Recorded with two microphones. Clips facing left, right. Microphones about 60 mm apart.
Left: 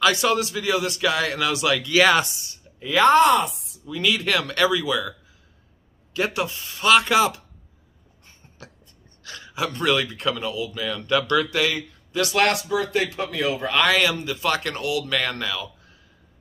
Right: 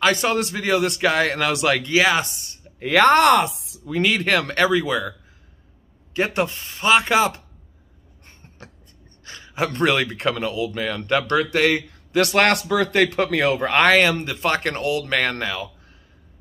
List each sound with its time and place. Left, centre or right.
0.0 s speech: right
2.8 s speech: right
3.8 s speech: right
6.1 s speech: right
6.8 s speech: right
8.3 s a sound: right
9.5 s speech: right